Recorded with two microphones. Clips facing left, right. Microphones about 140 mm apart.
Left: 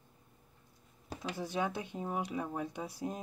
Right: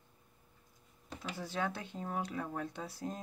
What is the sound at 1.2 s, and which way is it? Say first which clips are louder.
Speech: left 2 dB; 15° left (ahead or behind).